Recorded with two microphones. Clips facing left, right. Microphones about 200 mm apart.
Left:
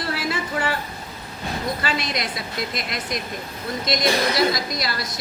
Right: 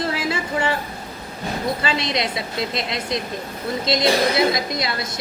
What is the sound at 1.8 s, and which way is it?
A woman's voice, 25° right (ahead or behind).